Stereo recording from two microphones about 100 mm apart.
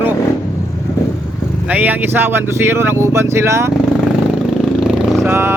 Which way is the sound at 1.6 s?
15° right (ahead or behind).